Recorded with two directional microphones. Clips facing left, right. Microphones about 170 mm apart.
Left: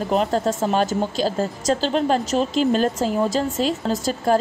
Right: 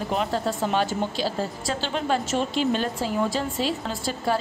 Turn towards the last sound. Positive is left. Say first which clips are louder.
# left 6 dB
turn(degrees=40)  # may be behind; listen again after turning